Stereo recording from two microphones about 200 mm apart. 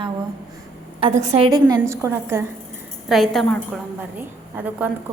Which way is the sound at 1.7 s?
15° right (ahead or behind).